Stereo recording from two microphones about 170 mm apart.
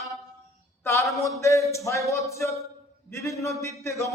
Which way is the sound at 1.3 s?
15° left (ahead or behind).